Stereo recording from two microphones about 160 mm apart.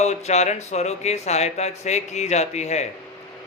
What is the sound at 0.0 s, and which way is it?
Speech, 45° left (ahead or behind).